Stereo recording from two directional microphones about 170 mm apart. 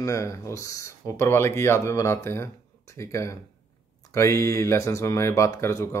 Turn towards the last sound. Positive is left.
turn(degrees=15)  # may be behind; listen again after turning